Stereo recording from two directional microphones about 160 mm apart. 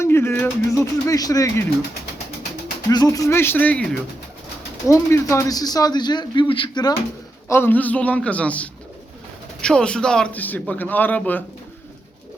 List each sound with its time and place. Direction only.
0.0 s a man's voice: 15° left (ahead or behind)
2.9 s a man's voice: 20° left (ahead or behind)
7.4 s a man's voice: 15° left (ahead or behind)